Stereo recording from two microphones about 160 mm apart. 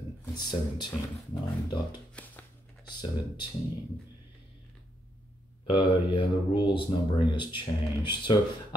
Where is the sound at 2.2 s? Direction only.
5° left (ahead or behind).